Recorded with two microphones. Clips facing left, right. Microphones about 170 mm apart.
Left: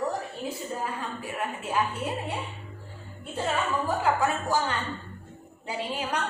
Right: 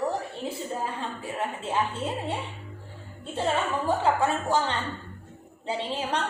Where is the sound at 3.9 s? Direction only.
25° right (ahead or behind).